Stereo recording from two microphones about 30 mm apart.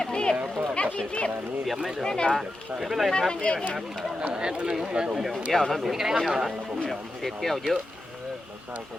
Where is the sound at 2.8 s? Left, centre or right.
Centre.